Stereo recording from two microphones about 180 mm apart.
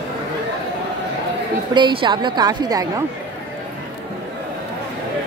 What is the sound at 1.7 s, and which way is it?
Speech, 25° right (ahead or behind).